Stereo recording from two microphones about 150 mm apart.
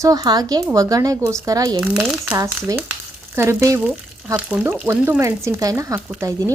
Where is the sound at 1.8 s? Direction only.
5° right (ahead or behind).